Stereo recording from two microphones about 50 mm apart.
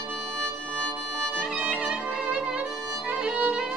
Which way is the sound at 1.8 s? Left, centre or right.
Right.